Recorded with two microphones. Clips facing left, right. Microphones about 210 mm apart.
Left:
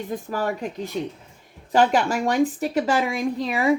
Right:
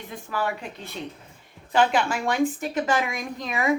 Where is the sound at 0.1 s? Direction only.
40° left (ahead or behind).